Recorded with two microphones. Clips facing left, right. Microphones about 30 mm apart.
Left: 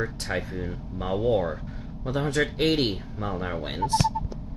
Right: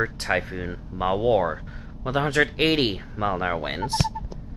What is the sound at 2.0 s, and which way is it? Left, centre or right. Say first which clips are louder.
Speech: right 4 dB; right.